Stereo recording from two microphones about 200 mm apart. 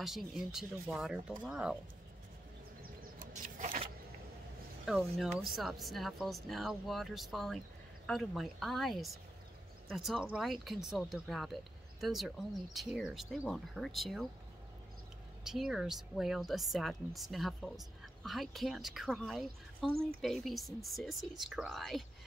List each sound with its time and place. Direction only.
0.0 s a woman's voice: centre (ahead or behind)
2.8 s vehicle: 45° right (ahead or behind)
4.8 s a woman's voice: centre (ahead or behind)
15.4 s a woman's voice: centre (ahead or behind)